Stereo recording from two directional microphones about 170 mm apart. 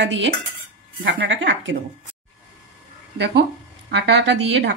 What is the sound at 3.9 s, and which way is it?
Speech, 90° right.